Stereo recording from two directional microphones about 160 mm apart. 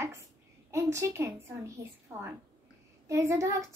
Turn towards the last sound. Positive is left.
turn(degrees=-20)  # may be behind; listen again after turning